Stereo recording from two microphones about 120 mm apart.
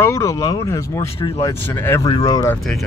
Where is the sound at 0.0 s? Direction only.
25° left (ahead or behind).